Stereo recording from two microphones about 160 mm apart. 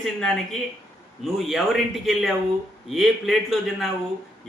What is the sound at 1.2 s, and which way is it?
A man's voice, centre (ahead or behind).